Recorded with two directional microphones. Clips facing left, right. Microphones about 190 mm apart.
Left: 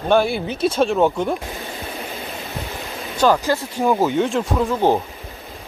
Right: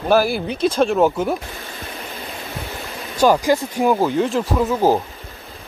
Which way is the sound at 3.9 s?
Centre (ahead or behind).